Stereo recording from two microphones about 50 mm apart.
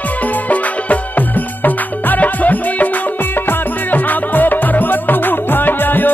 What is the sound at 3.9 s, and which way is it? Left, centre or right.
Music, left.